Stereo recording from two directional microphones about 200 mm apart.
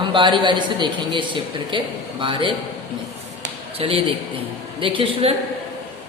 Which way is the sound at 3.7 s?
30° right (ahead or behind).